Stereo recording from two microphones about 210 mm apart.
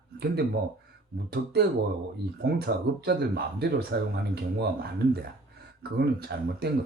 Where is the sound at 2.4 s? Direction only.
50° right (ahead or behind).